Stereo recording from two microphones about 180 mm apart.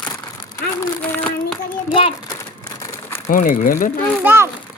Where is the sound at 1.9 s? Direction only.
30° left (ahead or behind).